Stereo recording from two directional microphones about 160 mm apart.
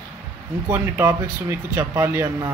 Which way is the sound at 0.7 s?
15° right (ahead or behind).